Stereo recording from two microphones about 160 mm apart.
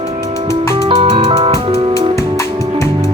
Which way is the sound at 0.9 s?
35° right (ahead or behind).